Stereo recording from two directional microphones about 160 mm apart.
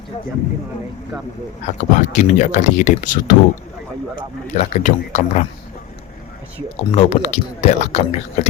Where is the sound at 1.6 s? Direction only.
50° left (ahead or behind).